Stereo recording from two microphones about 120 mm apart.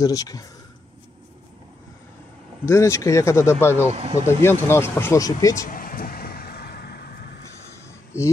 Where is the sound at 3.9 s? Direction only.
50° right (ahead or behind).